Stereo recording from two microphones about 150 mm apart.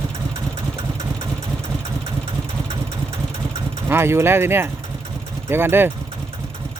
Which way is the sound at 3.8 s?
15° right (ahead or behind).